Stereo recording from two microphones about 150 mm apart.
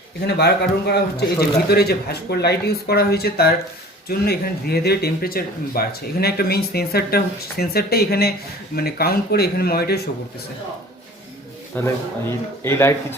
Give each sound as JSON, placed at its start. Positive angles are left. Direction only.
{"t": 0.3, "sound": "speech", "side_deg": 90}
{"t": 11.7, "sound": "a man's voice", "side_deg": 15}